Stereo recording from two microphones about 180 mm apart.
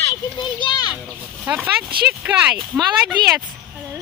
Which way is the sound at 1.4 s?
10° right (ahead or behind).